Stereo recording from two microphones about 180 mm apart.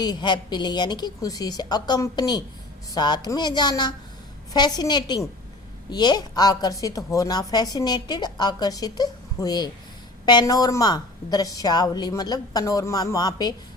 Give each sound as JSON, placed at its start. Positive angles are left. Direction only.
{"t": 0.0, "sound": "a woman's voice", "side_deg": 25}